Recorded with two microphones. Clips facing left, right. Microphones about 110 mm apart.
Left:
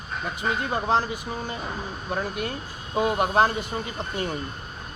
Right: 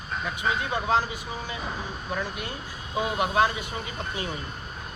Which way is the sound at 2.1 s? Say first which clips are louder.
Left 4 dB; 45° left (ahead or behind).